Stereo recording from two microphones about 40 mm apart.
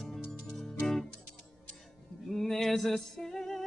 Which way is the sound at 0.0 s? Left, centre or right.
Centre.